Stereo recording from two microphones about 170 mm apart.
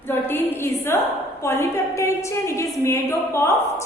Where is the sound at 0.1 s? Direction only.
10° left (ahead or behind).